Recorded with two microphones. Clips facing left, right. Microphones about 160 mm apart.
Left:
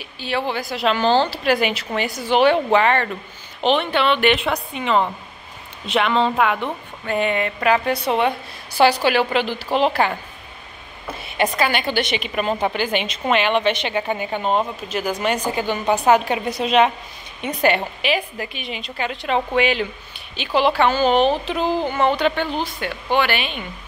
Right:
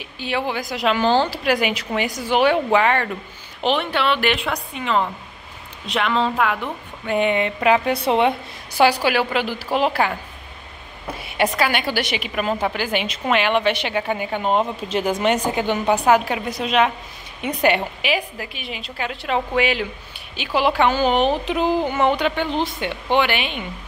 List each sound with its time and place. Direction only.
0.2 s a woman's voice: 15° right (ahead or behind); by 6.7 s centre (ahead or behind)
7.1 s a woman's voice: 20° right (ahead or behind)
11.6 s a woman's voice: 10° right (ahead or behind)
14.8 s speech: 25° right (ahead or behind)
16.1 s a woman's voice: 25° left (ahead or behind)
17.4 s a woman's voice: 15° right (ahead or behind)